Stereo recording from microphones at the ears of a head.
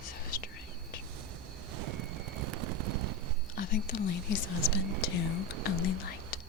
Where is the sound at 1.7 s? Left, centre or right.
Right.